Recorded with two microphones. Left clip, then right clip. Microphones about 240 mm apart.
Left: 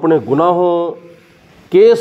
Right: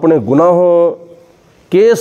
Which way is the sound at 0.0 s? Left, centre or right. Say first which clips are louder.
Right 3 dB; right.